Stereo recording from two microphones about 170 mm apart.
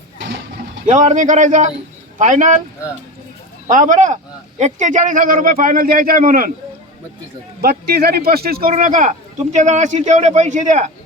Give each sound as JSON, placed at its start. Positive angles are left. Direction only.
{"t": 0.9, "sound": "speech", "side_deg": -45}
{"t": 3.7, "sound": "speech", "side_deg": -50}
{"t": 7.6, "sound": "speech", "side_deg": -65}
{"t": 8.7, "sound": "speech", "side_deg": -50}